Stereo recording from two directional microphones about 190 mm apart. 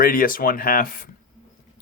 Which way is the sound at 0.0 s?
50° left (ahead or behind).